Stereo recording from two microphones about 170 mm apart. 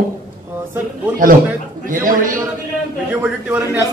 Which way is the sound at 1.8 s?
55° right (ahead or behind).